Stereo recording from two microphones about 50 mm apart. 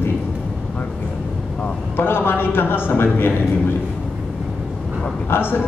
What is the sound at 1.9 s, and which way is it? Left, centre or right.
A man's voice, left.